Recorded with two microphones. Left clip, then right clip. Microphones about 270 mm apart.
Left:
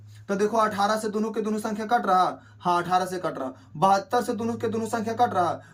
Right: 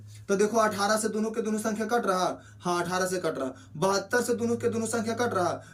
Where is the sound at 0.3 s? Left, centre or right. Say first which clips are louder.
Left 1 dB; left.